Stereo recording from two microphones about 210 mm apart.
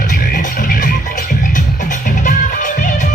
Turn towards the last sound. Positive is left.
turn(degrees=40)  # may be behind; listen again after turning